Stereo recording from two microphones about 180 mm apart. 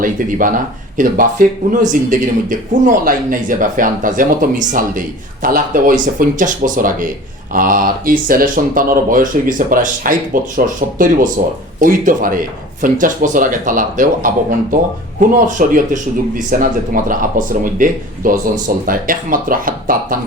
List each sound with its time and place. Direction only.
0.0 s speech: 50° right (ahead or behind)